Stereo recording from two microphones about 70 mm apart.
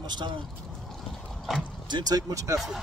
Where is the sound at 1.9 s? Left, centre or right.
Right.